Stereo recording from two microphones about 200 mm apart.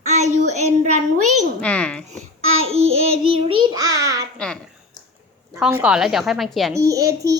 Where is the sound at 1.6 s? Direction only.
5° left (ahead or behind).